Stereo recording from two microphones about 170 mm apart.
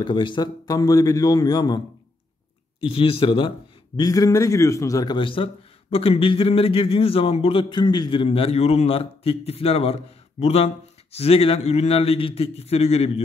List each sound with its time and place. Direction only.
0.0 s a man's voice: 30° left (ahead or behind)
2.8 s a man's voice: 30° left (ahead or behind)